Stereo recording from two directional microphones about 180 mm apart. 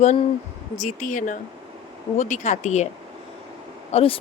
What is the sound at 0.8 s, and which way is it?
Speech, 45° left (ahead or behind).